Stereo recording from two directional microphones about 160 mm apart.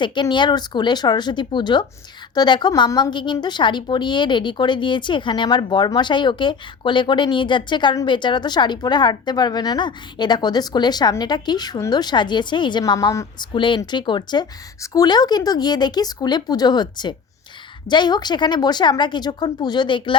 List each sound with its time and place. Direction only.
0.0 s speech: 30° left (ahead or behind)